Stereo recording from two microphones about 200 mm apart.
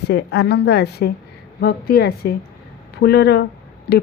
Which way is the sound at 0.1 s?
55° left (ahead or behind).